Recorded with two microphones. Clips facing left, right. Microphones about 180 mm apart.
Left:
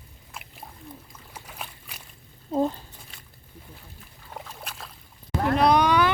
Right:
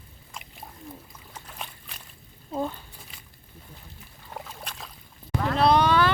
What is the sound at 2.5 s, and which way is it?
Speech, 35° left (ahead or behind).